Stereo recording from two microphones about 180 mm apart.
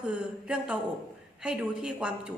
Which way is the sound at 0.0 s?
5° right (ahead or behind).